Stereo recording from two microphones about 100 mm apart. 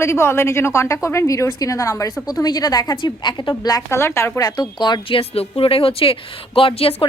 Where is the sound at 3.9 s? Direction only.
25° left (ahead or behind).